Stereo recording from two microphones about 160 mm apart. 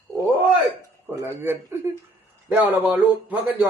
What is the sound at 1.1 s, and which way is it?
Speech, 10° right (ahead or behind).